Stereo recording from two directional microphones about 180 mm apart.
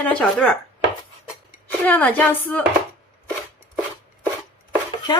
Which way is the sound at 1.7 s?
10° left (ahead or behind).